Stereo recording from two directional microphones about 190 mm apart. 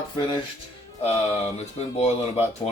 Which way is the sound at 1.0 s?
35° left (ahead or behind).